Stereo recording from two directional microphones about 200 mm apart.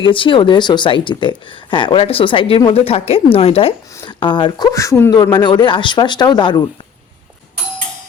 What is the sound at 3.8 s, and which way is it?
Speech, 15° left (ahead or behind).